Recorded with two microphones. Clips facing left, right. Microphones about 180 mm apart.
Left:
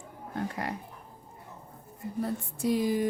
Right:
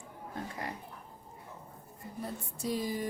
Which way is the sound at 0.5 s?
70° left (ahead or behind).